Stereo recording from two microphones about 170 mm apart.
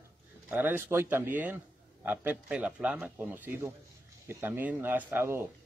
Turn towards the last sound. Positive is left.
turn(degrees=-15)  # may be behind; listen again after turning